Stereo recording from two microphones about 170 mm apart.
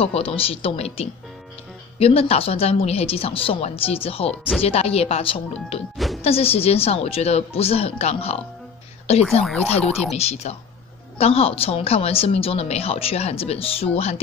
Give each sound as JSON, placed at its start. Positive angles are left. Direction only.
{"t": 0.0, "sound": "speech", "side_deg": 35}
{"t": 9.6, "sound": "speech", "side_deg": 35}